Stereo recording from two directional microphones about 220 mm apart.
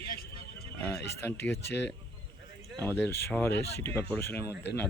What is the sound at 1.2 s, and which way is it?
Speech, 10° left (ahead or behind).